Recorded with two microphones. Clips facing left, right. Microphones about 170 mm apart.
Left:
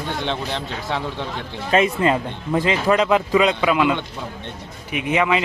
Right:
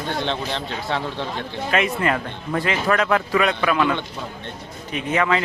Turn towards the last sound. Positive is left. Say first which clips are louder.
# left 1 dB
turn(degrees=15)  # may be behind; listen again after turning